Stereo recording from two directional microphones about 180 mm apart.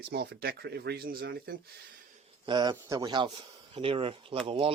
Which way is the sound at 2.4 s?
25° right (ahead or behind).